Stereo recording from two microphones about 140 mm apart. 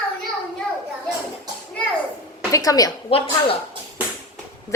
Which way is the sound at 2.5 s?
25° left (ahead or behind).